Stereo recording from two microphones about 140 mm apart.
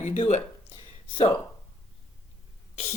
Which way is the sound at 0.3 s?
55° left (ahead or behind).